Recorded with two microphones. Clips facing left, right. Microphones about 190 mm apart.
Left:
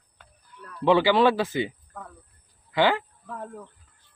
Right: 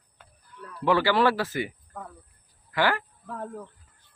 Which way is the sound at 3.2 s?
5° right (ahead or behind).